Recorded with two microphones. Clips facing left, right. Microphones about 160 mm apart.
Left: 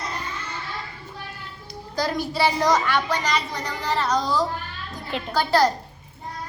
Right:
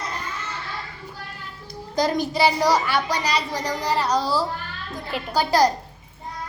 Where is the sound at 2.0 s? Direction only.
20° right (ahead or behind).